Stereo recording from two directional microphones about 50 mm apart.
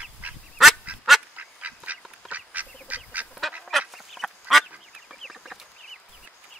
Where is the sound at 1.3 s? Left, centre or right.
Right.